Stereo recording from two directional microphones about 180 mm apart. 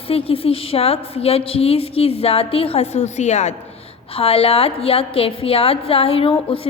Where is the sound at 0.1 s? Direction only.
30° left (ahead or behind).